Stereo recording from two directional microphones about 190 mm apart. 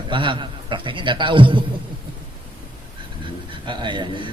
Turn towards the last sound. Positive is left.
turn(degrees=-25)  # may be behind; listen again after turning